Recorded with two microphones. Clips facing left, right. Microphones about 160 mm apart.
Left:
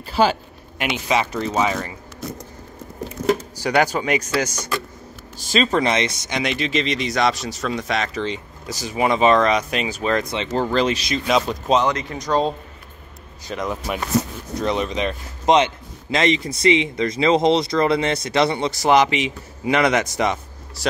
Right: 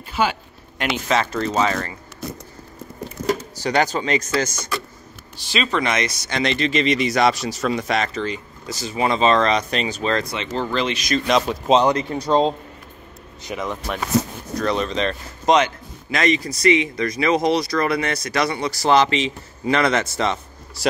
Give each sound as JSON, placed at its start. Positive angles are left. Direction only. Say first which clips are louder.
{"t": 0.0, "sound": "speech", "louder": "left 4 dB", "side_deg": 35}
{"t": 0.7, "sound": "speech", "louder": "even", "side_deg": 10}
{"t": 3.5, "sound": "speech", "louder": "left 1 dB", "side_deg": 10}
{"t": 5.4, "sound": "speech", "louder": "left 3 dB", "side_deg": 45}
{"t": 8.3, "sound": "speech", "louder": "even", "side_deg": 15}
{"t": 10.5, "sound": "speech", "louder": "left 4 dB", "side_deg": 40}
{"t": 11.2, "sound": "speech", "louder": "even", "side_deg": 0}
{"t": 11.8, "sound": "speech", "louder": "right 3 dB", "side_deg": -30}
{"t": 13.6, "sound": "speech", "louder": "left 2 dB", "side_deg": 0}
{"t": 14.6, "sound": "speech", "louder": "even", "side_deg": 15}
{"t": 15.5, "sound": "speech", "louder": "left 1 dB", "side_deg": 25}